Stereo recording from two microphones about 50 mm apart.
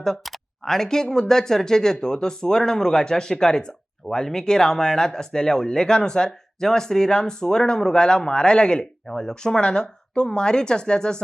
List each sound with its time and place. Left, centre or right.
0.0 s speech: centre